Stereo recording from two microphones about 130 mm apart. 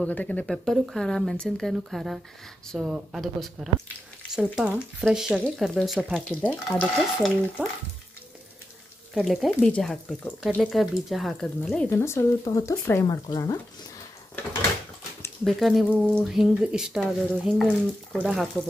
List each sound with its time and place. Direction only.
0.0 s speech: 10° left (ahead or behind)
4.3 s stir: 5° right (ahead or behind)
5.0 s speech: 5° right (ahead or behind)
6.2 s speech: 10° left (ahead or behind)
6.8 s stir: 5° right (ahead or behind)
9.1 s speech: centre (ahead or behind)
11.9 s speech: 20° left (ahead or behind)
15.4 s speech: centre (ahead or behind)